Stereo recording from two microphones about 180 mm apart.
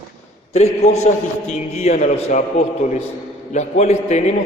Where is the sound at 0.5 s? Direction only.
40° left (ahead or behind).